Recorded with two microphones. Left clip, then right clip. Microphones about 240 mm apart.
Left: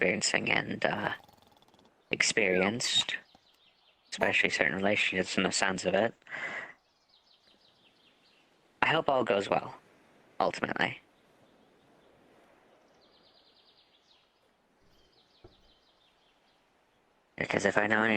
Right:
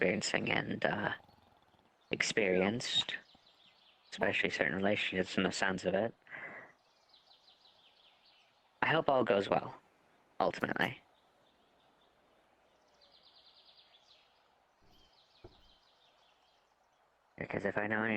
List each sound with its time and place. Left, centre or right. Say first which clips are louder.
0.0 s speech: left 4 dB; centre
6.2 s a sound: left 9 dB; left
8.8 s speech: left 3 dB; centre
17.3 s speech: left 9 dB; left